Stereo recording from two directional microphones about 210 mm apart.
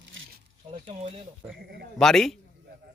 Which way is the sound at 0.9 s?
30° right (ahead or behind).